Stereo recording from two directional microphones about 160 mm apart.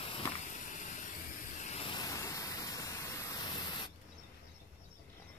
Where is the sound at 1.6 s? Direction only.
40° left (ahead or behind).